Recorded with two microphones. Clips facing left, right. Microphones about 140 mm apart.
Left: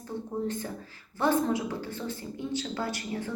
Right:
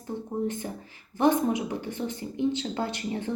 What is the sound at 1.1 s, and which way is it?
A woman's voice, 20° right (ahead or behind).